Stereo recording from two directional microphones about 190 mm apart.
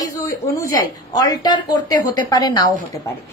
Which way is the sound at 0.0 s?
15° left (ahead or behind).